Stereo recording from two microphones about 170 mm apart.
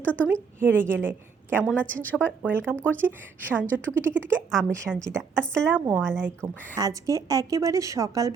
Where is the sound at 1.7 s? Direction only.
10° left (ahead or behind).